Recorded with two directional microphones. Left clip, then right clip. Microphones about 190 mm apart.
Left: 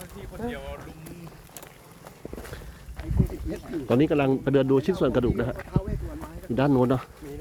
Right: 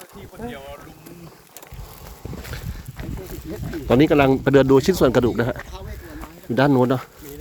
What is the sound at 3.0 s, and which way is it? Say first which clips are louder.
Boat: right 4 dB; 15° right (ahead or behind).